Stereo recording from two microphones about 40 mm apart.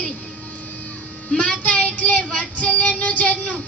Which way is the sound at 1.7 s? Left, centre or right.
Left.